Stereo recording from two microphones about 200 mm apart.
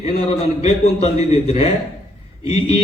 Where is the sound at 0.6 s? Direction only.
30° left (ahead or behind).